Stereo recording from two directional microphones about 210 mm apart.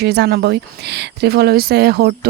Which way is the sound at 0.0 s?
50° right (ahead or behind).